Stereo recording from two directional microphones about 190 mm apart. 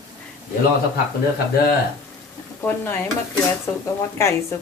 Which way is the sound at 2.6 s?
10° left (ahead or behind).